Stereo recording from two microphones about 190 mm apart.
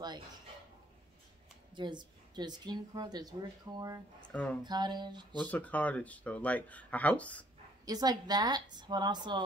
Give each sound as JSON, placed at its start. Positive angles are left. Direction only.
{"t": 1.8, "sound": "speech", "side_deg": -25}
{"t": 4.3, "sound": "speech", "side_deg": 5}
{"t": 4.6, "sound": "speech", "side_deg": -20}
{"t": 5.4, "sound": "speech", "side_deg": 10}
{"t": 7.8, "sound": "speech", "side_deg": -20}